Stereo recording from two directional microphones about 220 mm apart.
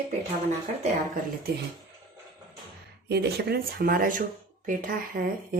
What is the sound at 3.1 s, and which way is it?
Speech, 45° right (ahead or behind).